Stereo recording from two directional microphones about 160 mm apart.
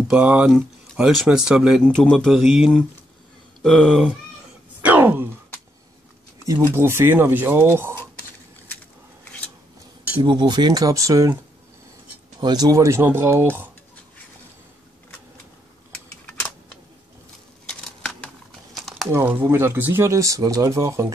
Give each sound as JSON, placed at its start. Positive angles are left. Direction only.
{"t": 0.1, "sound": "speech", "side_deg": -10}
{"t": 4.8, "sound": "a sound", "side_deg": -10}
{"t": 6.4, "sound": "speech", "side_deg": -15}
{"t": 10.1, "sound": "speech", "side_deg": -30}
{"t": 12.4, "sound": "speech", "side_deg": -25}
{"t": 17.6, "sound": "a sound", "side_deg": 5}
{"t": 18.8, "sound": "crumpling", "side_deg": 0}
{"t": 19.1, "sound": "speech", "side_deg": -15}